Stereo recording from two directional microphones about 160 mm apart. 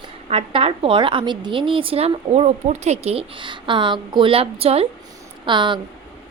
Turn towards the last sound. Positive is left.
turn(degrees=-30)  # may be behind; listen again after turning